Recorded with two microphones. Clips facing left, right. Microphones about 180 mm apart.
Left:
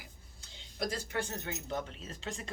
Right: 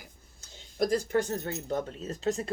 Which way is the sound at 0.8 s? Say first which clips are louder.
Right 9 dB; 45° right (ahead or behind).